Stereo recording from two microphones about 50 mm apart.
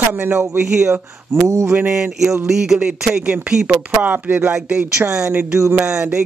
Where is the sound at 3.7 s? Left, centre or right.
Right.